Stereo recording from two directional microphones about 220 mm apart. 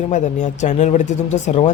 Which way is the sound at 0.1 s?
30° left (ahead or behind).